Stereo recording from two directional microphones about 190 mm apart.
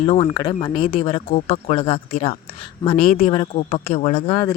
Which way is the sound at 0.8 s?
45° left (ahead or behind).